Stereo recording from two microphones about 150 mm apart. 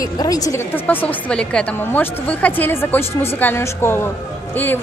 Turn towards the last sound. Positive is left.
turn(degrees=15)  # may be behind; listen again after turning